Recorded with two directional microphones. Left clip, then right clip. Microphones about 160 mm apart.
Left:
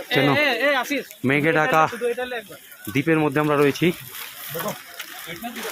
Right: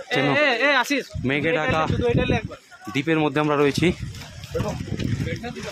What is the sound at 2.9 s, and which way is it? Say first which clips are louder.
Speech: left 1 dB; 15° left (ahead or behind).